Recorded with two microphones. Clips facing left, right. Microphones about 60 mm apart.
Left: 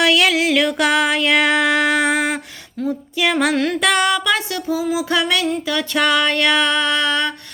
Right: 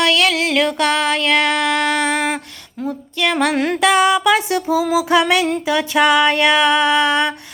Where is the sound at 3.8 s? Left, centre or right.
Centre.